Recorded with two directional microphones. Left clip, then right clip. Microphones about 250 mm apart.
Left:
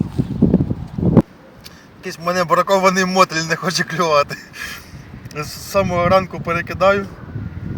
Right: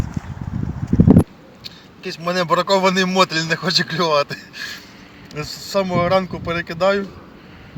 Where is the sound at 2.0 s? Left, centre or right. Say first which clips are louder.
Left 2 dB; centre.